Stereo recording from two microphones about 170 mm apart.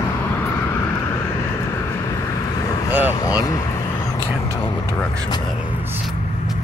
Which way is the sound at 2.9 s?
10° right (ahead or behind).